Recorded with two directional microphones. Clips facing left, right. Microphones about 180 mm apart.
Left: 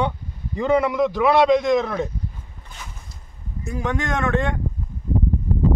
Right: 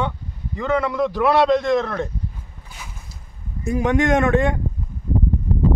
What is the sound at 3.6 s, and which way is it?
Speech, 15° right (ahead or behind).